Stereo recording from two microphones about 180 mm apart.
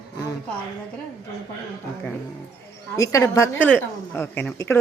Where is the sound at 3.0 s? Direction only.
20° left (ahead or behind).